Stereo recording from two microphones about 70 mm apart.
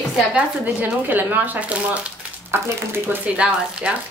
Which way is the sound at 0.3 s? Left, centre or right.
Centre.